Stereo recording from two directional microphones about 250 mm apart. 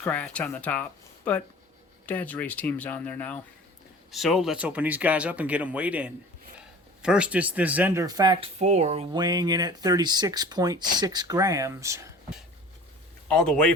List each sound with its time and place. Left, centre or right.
0.0 s speech: centre
13.2 s speech: centre